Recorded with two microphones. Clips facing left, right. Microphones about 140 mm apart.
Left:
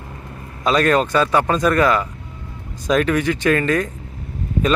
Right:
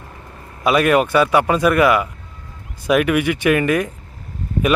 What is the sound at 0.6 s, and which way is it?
Speech, 10° right (ahead or behind).